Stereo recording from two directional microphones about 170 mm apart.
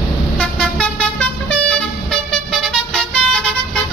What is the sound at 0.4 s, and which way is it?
Vehicle, 5° left (ahead or behind).